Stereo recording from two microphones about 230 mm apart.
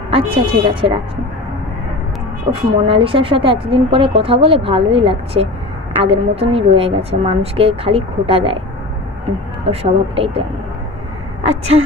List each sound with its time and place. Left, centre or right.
0.1 s speech: right
2.5 s speech: right
9.7 s speech: right